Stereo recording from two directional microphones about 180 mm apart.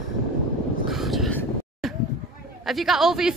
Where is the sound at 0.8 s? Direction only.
Centre (ahead or behind).